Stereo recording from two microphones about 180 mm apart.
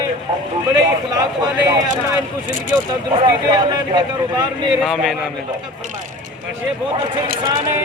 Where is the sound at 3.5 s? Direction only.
20° right (ahead or behind).